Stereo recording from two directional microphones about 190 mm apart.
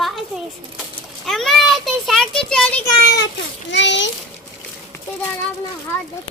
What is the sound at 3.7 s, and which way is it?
Speech, 70° left (ahead or behind).